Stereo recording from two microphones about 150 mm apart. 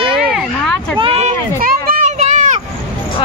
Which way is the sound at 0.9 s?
40° right (ahead or behind).